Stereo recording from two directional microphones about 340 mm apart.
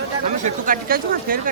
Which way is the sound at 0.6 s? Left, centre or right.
Right.